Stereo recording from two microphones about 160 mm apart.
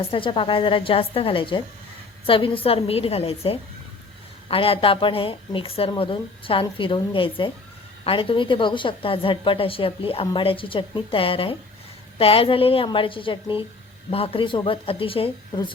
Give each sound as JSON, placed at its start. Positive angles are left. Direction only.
{"t": 0.1, "sound": "a woman's voice", "side_deg": 30}